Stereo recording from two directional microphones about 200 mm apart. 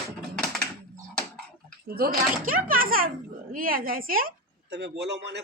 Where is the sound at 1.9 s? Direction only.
50° right (ahead or behind).